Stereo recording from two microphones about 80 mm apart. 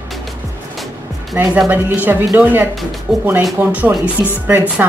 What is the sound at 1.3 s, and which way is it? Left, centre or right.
Speech, right.